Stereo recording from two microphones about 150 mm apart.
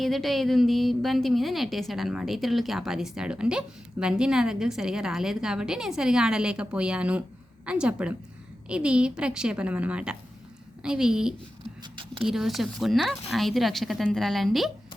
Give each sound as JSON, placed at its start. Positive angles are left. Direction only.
{"t": 0.0, "sound": "a woman's voice", "side_deg": 0}
{"t": 11.8, "sound": "zipper", "side_deg": -35}
{"t": 12.3, "sound": "a woman's voice", "side_deg": 0}